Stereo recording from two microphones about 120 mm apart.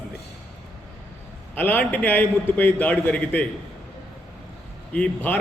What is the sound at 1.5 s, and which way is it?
A man's voice, 15° left (ahead or behind).